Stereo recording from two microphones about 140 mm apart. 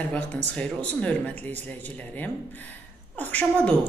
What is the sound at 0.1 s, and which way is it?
A woman's voice, 10° left (ahead or behind).